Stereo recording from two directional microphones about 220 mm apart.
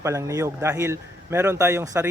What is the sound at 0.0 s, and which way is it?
Speech, 15° right (ahead or behind).